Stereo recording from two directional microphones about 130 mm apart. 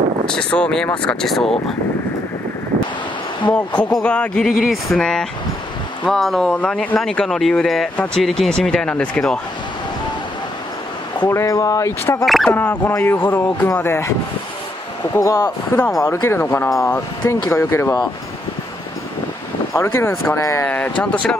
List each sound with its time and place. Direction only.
0.3 s speech: 5° left (ahead or behind)
4.0 s speech: 10° left (ahead or behind)
11.2 s speech: 25° left (ahead or behind)
15.1 s speech: 25° left (ahead or behind)
19.7 s speech: 20° left (ahead or behind)
20.6 s speech: 15° left (ahead or behind)